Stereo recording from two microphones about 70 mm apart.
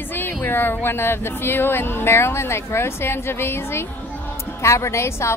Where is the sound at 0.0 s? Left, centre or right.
Left.